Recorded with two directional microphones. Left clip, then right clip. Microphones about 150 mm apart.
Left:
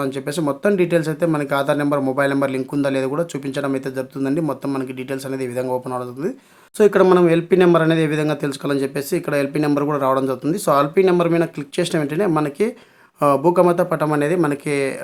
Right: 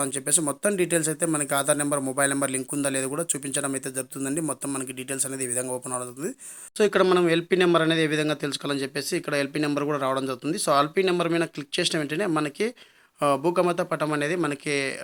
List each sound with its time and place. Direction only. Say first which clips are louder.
0.0 s a man's voice: left 6 dB; 20° right (ahead or behind)